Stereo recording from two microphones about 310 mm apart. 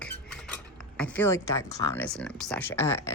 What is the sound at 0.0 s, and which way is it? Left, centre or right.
Cutlery, centre.